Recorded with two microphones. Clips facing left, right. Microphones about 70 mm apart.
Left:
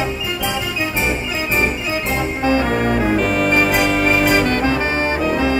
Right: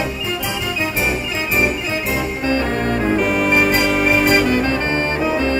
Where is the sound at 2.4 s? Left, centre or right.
Centre.